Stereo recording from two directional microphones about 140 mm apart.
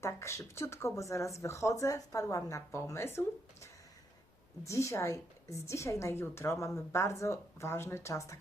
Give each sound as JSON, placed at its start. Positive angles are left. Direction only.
{"t": 0.0, "sound": "a woman's voice", "side_deg": 20}